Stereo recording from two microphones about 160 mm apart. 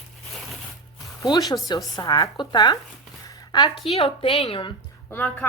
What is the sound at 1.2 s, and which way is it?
A woman's voice, 25° left (ahead or behind).